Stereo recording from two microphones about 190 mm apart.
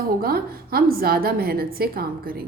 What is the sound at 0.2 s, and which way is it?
A woman's voice, 50° right (ahead or behind).